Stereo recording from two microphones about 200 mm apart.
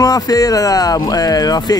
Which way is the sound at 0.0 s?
20° left (ahead or behind).